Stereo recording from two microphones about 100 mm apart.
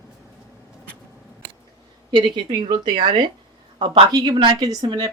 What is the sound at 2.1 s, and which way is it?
A woman's voice, 55° right (ahead or behind).